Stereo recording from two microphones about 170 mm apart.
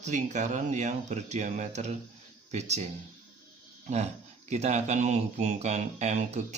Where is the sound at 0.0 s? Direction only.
45° right (ahead or behind).